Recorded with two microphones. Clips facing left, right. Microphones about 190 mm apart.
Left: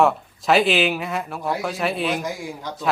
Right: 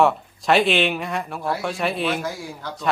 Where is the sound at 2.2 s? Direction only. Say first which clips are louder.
Left 1 dB; 15° left (ahead or behind).